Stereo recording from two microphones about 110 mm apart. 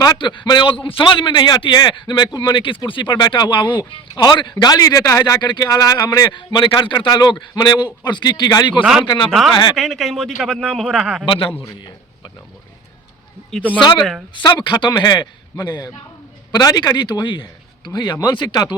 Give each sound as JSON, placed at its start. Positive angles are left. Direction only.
{"t": 0.0, "sound": "a man's voice", "side_deg": 40}
{"t": 5.4, "sound": "a man's voice", "side_deg": 40}
{"t": 8.8, "sound": "a man's voice", "side_deg": -5}
{"t": 9.0, "sound": "a man's voice", "side_deg": 45}
{"t": 9.7, "sound": "a man's voice", "side_deg": 0}
{"t": 11.3, "sound": "a man's voice", "side_deg": 50}
{"t": 14.3, "sound": "a man's voice", "side_deg": 45}